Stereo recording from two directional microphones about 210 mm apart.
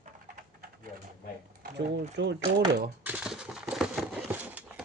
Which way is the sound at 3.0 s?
5° right (ahead or behind).